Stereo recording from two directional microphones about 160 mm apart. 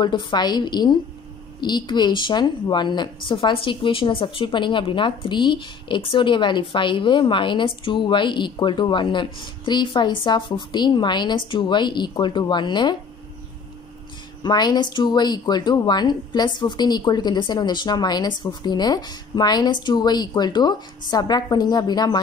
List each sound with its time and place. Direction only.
0.0 s speech: 30° left (ahead or behind)
14.4 s speech: 25° left (ahead or behind)